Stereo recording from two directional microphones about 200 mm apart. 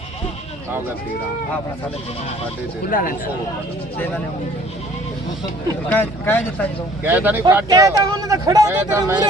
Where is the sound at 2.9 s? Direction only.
45° left (ahead or behind).